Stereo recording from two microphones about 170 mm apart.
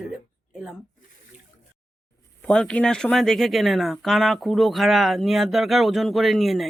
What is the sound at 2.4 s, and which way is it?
Speech, 5° left (ahead or behind).